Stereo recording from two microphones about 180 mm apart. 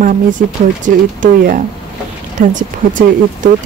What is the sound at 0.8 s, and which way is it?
Speech, 45° right (ahead or behind).